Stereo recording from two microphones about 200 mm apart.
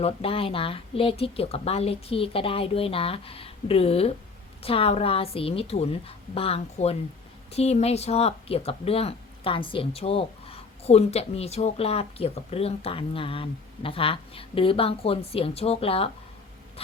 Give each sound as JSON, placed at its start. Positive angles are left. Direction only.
{"t": 0.0, "sound": "speech", "side_deg": 30}